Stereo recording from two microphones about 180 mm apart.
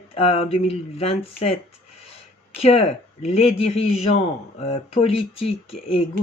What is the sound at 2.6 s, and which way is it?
Speech, 35° left (ahead or behind).